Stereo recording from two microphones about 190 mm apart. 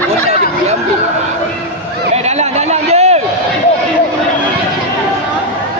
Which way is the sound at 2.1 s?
35° right (ahead or behind).